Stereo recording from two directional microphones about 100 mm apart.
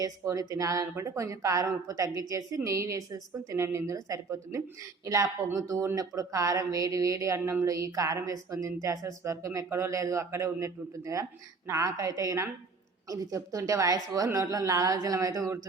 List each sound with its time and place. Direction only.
0.0 s speech: 35° right (ahead or behind)
7.3 s speech: 20° right (ahead or behind)
7.6 s speech: 35° right (ahead or behind)